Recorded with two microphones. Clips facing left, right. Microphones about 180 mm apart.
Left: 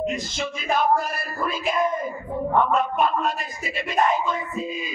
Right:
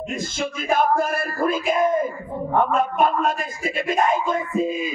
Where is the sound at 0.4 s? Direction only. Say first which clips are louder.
Right 4 dB; 50° right (ahead or behind).